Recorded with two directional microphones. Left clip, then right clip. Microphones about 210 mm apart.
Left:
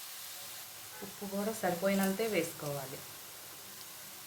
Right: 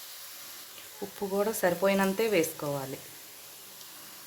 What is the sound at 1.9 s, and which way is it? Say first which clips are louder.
Speech: right 6 dB; 45° right (ahead or behind).